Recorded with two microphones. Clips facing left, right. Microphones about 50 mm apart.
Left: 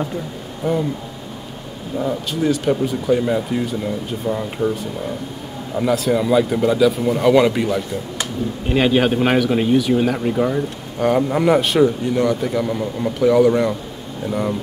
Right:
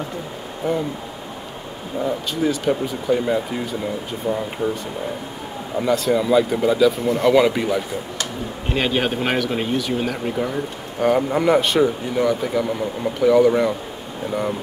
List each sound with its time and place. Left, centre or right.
0.6 s speech: centre
2.0 s speech: centre
5.8 s speech: centre